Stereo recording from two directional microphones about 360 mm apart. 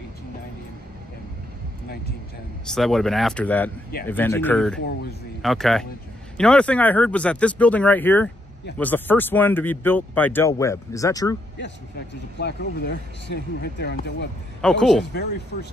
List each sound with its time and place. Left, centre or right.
2.7 s speech: centre
12.4 s speech: left
14.6 s speech: centre